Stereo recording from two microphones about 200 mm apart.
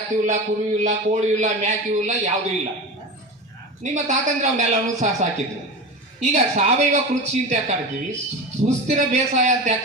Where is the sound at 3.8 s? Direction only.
35° right (ahead or behind).